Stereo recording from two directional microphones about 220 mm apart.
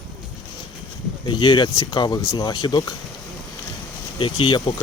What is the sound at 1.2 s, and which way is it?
Speech, 20° left (ahead or behind).